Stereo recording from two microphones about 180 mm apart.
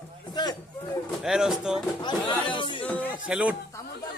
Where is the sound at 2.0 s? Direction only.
25° left (ahead or behind).